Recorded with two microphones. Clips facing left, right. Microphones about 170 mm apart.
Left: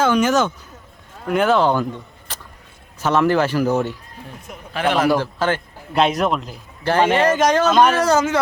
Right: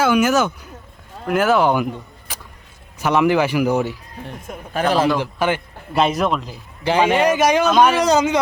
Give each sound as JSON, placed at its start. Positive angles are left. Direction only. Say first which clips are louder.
{"t": 0.0, "sound": "a man's voice", "louder": "even", "side_deg": -10}
{"t": 4.3, "sound": "a man's voice", "louder": "right 4 dB", "side_deg": -45}
{"t": 5.2, "sound": "a man's voice", "louder": "right 1 dB", "side_deg": -15}
{"t": 5.9, "sound": "a man's voice", "louder": "even", "side_deg": 0}
{"t": 6.8, "sound": "a man's voice", "louder": "even", "side_deg": -15}
{"t": 7.7, "sound": "a man's voice", "louder": "even", "side_deg": 0}
{"t": 7.9, "sound": "a man's voice", "louder": "right 1 dB", "side_deg": -15}